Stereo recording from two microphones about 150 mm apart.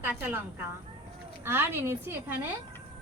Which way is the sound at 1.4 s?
15° right (ahead or behind).